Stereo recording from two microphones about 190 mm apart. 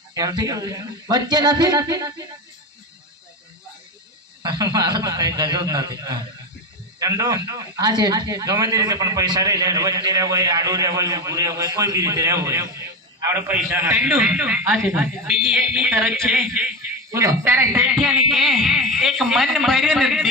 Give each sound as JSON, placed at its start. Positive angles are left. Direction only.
{"t": 0.1, "sound": "a man's voice", "side_deg": -20}
{"t": 4.4, "sound": "a man's voice", "side_deg": -20}
{"t": 17.8, "sound": "a man's voice", "side_deg": 0}